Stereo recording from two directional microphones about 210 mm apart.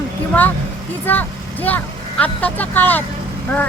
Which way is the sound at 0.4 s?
5° left (ahead or behind).